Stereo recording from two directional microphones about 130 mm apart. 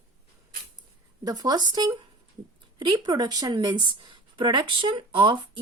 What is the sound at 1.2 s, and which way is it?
A woman's voice, 30° right (ahead or behind).